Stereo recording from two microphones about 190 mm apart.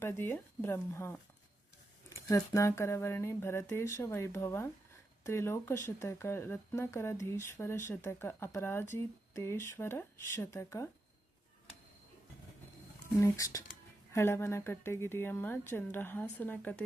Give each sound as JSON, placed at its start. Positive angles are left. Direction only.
{"t": 0.0, "sound": "speech", "side_deg": 10}
{"t": 13.1, "sound": "speech", "side_deg": 15}